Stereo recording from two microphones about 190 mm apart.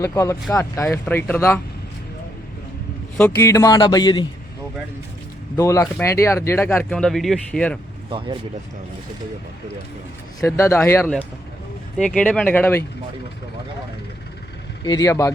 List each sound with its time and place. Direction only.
0.0 s speech: 15° left (ahead or behind)
3.2 s speech: 10° left (ahead or behind)
5.5 s speech: 15° left (ahead or behind)
10.4 s speech: 15° left (ahead or behind)
14.8 s speech: 20° left (ahead or behind)